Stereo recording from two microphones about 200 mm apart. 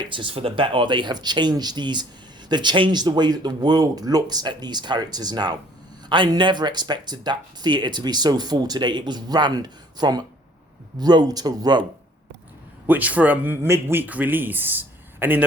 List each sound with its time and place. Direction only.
0.1 s speech: 25° right (ahead or behind)
12.9 s speech: 10° right (ahead or behind)